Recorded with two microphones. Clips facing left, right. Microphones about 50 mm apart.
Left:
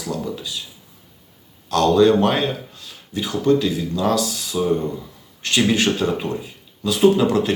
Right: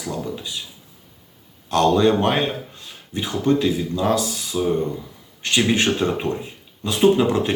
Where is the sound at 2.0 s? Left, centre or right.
Centre.